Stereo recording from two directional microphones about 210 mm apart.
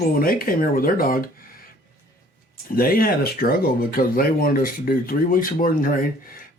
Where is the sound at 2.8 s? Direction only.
45° left (ahead or behind).